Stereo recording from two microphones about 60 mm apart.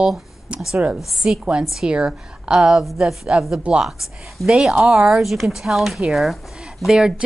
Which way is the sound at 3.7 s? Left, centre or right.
Right.